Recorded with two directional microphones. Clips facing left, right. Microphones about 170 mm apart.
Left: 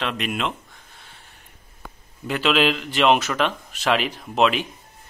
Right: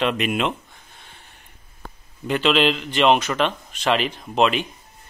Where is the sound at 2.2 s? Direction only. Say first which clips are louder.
Right 1 dB; centre (ahead or behind).